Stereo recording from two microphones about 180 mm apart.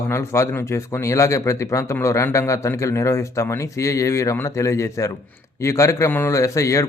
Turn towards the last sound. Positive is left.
turn(degrees=15)  # may be behind; listen again after turning